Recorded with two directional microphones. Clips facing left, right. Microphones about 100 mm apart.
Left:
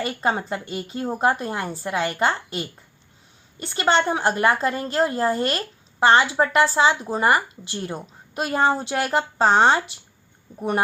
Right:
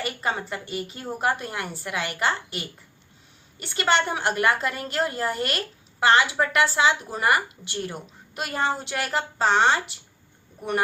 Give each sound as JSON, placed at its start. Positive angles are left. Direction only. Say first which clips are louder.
{"t": 0.0, "sound": "a woman's voice", "louder": "left 4 dB", "side_deg": 35}